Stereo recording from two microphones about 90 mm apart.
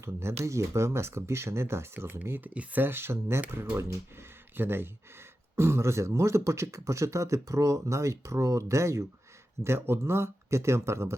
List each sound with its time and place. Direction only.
0.0 s speech: 30° right (ahead or behind)